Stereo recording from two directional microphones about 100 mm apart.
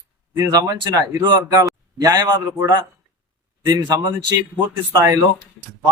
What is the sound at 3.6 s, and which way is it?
Speech, 40° right (ahead or behind).